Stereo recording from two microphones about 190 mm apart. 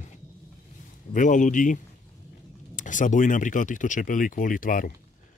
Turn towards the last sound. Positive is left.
turn(degrees=45)  # may be behind; listen again after turning